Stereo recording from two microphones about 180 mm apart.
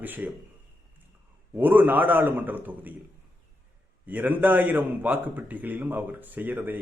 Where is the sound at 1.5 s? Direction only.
10° right (ahead or behind).